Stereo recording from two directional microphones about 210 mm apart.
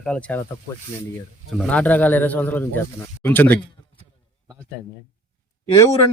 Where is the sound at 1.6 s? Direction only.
5° left (ahead or behind).